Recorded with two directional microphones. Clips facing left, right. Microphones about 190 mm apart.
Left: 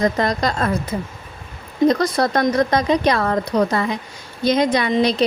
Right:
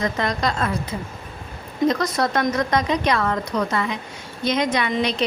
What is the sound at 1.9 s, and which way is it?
A woman's voice, 35° left (ahead or behind).